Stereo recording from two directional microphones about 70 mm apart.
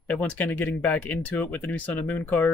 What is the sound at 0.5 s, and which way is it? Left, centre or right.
Speech, left.